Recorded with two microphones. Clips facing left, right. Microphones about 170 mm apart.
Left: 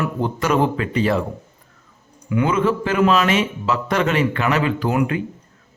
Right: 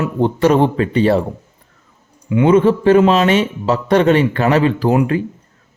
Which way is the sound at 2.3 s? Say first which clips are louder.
Right 7 dB; 25° right (ahead or behind).